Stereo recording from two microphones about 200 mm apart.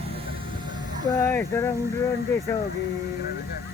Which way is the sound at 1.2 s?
10° left (ahead or behind).